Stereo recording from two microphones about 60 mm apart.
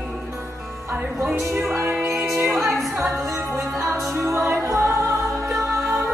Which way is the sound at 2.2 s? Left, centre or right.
Right.